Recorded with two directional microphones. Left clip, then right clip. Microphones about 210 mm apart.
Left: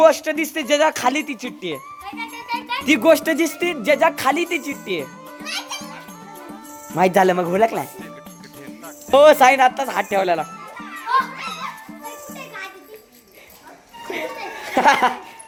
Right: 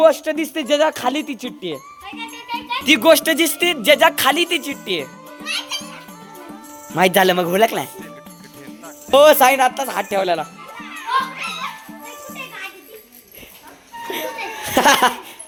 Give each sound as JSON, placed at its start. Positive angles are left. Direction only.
{"t": 0.0, "sound": "speech", "side_deg": -5}
{"t": 5.5, "sound": "a child's voice", "side_deg": 20}
{"t": 6.5, "sound": "speech", "side_deg": 0}
{"t": 9.0, "sound": "speech", "side_deg": 0}
{"t": 14.1, "sound": "a sound", "side_deg": -10}